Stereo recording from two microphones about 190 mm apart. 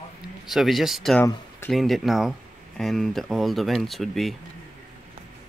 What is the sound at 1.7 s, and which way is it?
Speech, centre (ahead or behind).